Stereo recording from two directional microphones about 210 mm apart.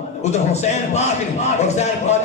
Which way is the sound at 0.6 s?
30° left (ahead or behind).